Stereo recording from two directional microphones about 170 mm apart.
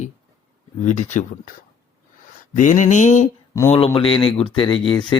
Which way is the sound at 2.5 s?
50° left (ahead or behind).